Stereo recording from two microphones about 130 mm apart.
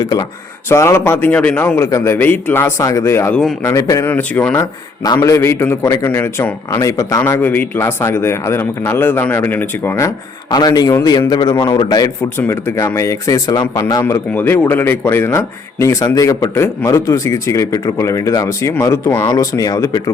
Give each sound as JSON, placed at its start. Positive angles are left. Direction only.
{"t": 0.0, "sound": "a man's voice", "side_deg": 30}
{"t": 0.7, "sound": "a man's voice", "side_deg": 20}
{"t": 4.0, "sound": "speech", "side_deg": 15}
{"t": 5.0, "sound": "a man's voice", "side_deg": 25}
{"t": 10.5, "sound": "a man's voice", "side_deg": 30}
{"t": 12.4, "sound": "a man's voice", "side_deg": 20}
{"t": 14.0, "sound": "a man's voice", "side_deg": 15}